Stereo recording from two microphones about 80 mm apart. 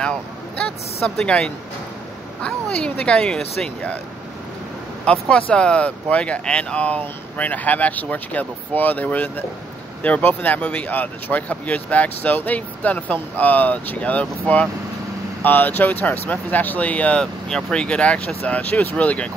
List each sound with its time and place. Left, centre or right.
1.0 s speech: centre
5.1 s speech: centre